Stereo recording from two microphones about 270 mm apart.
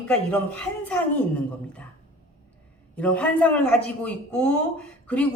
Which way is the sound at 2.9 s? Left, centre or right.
Centre.